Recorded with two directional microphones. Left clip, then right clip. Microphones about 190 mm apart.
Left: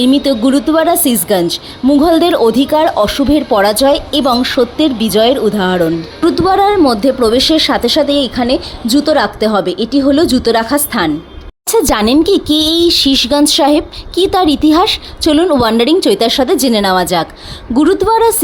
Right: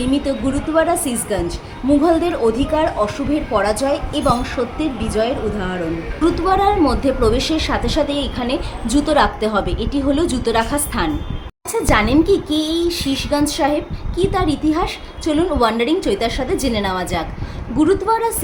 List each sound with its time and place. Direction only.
0.0 s a woman's voice: 50° left (ahead or behind)